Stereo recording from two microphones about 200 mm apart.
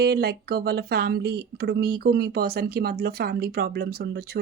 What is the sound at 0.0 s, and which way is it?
Speech, 50° right (ahead or behind).